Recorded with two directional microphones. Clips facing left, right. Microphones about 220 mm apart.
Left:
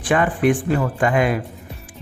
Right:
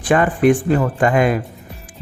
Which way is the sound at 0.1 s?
40° right (ahead or behind).